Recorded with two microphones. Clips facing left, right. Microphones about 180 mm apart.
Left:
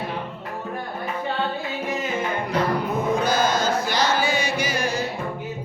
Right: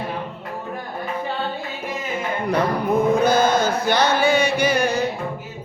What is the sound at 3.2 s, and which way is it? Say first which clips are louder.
Chant: right 4 dB; 55° right (ahead or behind).